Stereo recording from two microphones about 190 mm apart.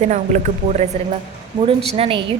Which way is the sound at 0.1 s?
40° right (ahead or behind).